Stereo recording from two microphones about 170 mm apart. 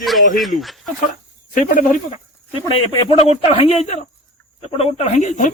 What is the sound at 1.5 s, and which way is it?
Speech, 55° left (ahead or behind).